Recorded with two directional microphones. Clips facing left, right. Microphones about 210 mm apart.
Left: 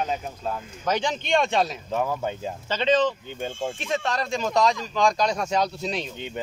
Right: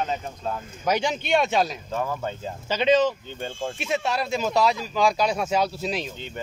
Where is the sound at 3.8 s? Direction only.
10° right (ahead or behind).